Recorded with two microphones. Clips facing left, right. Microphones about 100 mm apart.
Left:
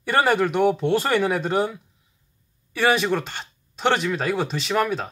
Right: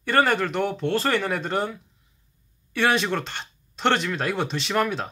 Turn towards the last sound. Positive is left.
turn(degrees=0)  # may be behind; listen again after turning